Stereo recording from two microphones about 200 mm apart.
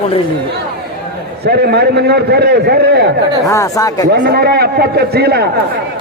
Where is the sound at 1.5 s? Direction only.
50° right (ahead or behind).